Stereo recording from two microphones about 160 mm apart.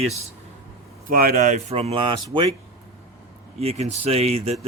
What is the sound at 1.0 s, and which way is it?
Speech, 65° right (ahead or behind).